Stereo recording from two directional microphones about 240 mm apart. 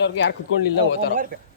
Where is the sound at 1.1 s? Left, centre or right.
Right.